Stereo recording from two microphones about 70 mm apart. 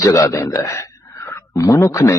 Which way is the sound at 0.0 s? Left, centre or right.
Left.